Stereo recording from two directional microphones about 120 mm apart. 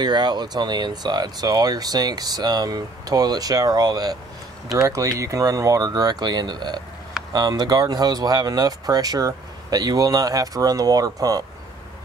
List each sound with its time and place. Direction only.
0.0 s speech: 35° right (ahead or behind)